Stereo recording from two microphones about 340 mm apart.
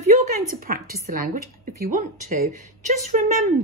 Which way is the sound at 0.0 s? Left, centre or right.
Centre.